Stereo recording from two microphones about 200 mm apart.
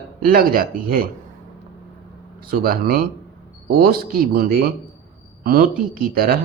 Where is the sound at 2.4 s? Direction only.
45° right (ahead or behind).